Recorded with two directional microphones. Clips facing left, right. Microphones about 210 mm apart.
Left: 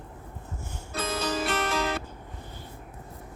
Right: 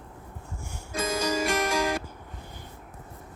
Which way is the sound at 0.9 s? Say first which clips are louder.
Right 2 dB; 10° right (ahead or behind).